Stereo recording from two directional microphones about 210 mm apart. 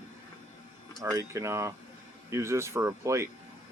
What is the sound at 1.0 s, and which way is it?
Speech, 15° right (ahead or behind).